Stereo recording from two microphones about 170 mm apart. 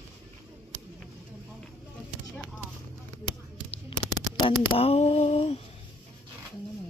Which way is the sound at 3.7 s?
30° left (ahead or behind).